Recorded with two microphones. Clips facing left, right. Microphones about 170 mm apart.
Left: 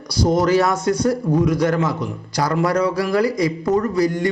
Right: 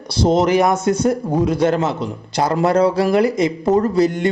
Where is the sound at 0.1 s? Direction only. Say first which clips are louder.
Right 2 dB; 25° right (ahead or behind).